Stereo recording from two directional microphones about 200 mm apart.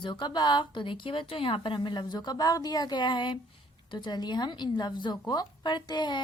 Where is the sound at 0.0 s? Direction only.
20° left (ahead or behind).